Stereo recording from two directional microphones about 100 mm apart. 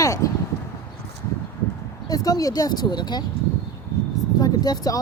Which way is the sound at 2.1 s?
40° left (ahead or behind).